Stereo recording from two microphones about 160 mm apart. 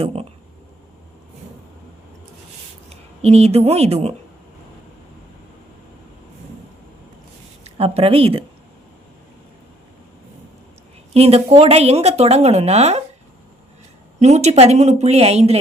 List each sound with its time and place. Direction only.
0.0 s speech: 40° right (ahead or behind)
2.9 s a woman's voice: 40° right (ahead or behind)
7.6 s a woman's voice: 40° right (ahead or behind)
11.1 s speech: 40° right (ahead or behind)
14.2 s speech: 45° right (ahead or behind)